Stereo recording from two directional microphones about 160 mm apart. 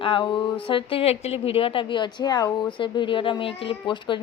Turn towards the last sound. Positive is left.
turn(degrees=30)  # may be behind; listen again after turning